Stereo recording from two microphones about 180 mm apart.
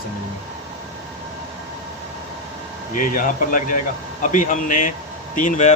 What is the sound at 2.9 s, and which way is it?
A man's voice, 50° left (ahead or behind).